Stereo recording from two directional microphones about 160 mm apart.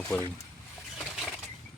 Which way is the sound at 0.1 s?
10° left (ahead or behind).